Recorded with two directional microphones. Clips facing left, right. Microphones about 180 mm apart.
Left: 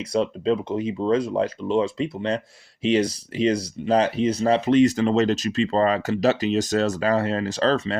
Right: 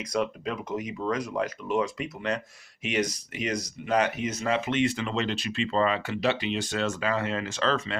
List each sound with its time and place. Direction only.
0.0 s speech: 30° left (ahead or behind)